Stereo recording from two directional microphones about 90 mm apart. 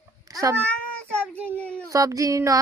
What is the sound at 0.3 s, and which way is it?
Cat, 45° right (ahead or behind).